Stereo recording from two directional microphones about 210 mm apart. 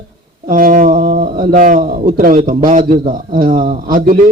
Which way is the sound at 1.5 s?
40° right (ahead or behind).